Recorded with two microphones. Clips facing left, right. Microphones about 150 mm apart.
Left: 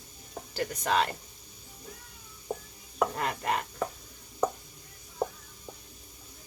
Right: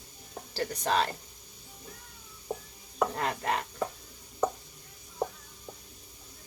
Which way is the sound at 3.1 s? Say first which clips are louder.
Even; 30° right (ahead or behind).